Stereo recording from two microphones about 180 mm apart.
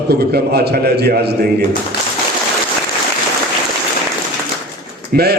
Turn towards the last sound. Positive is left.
turn(degrees=-60)  # may be behind; listen again after turning